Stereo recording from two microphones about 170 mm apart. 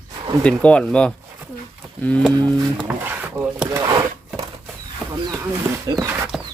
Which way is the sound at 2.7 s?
10° right (ahead or behind).